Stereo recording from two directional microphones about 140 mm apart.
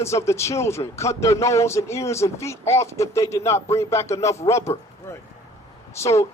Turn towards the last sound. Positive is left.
turn(degrees=20)  # may be behind; listen again after turning